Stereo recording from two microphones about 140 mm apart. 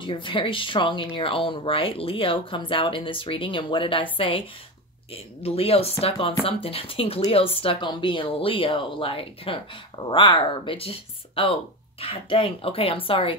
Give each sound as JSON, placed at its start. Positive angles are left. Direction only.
{"t": 0.0, "sound": "speech", "side_deg": 35}